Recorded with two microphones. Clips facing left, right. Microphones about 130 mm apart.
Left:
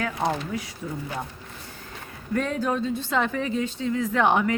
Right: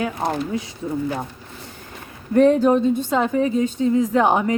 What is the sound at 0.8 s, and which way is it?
Speech, 25° right (ahead or behind).